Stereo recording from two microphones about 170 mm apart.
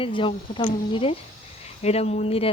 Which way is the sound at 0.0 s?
30° left (ahead or behind).